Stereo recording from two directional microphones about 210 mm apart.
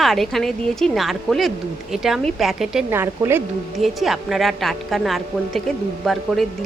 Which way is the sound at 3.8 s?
Centre (ahead or behind).